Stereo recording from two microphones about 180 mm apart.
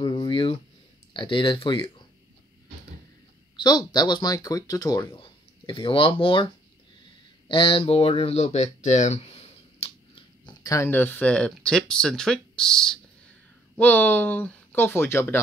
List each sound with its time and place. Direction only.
0.0 s a sound: 25° left (ahead or behind)
1.1 s speech: 25° left (ahead or behind)
3.5 s speech: 25° left (ahead or behind)